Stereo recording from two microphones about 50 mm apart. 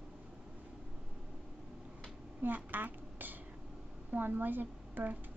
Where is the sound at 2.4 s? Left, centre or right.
Right.